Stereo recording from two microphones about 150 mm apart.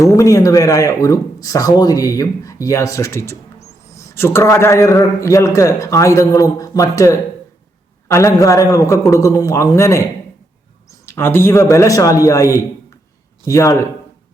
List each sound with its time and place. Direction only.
0.0 s speech: 20° left (ahead or behind)